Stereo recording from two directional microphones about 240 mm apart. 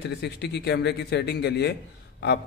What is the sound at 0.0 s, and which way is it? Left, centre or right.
A man's voice, left.